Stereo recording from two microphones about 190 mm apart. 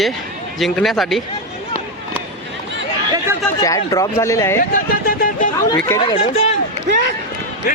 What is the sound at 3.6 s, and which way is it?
Speech, 20° left (ahead or behind).